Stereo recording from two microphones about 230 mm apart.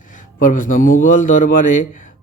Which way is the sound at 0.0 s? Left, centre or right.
Left.